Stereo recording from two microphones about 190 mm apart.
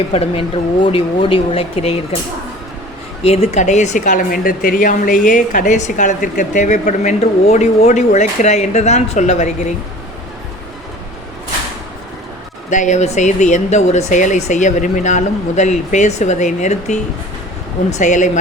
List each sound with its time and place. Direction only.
0.1 s speech: 30° left (ahead or behind)
3.2 s a woman's voice: 30° left (ahead or behind)
12.7 s a woman's voice: 40° left (ahead or behind)